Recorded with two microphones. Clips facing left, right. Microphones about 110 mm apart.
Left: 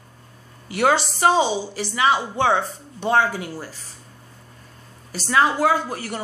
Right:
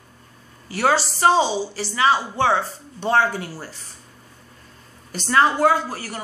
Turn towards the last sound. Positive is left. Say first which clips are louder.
# left 2 dB
turn(degrees=20)  # may be behind; listen again after turning